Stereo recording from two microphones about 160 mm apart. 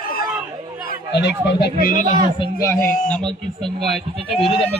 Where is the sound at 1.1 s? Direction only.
90° left.